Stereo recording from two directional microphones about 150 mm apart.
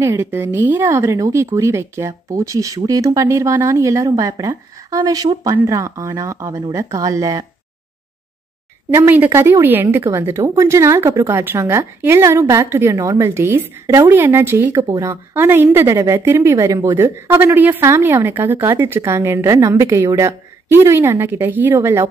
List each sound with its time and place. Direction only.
0.0 s speech: 15° right (ahead or behind)
8.9 s a woman's voice: 15° right (ahead or behind)